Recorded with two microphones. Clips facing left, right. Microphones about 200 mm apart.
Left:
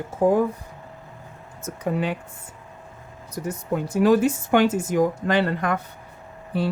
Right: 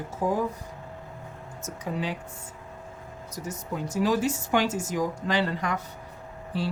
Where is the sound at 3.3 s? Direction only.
60° left (ahead or behind).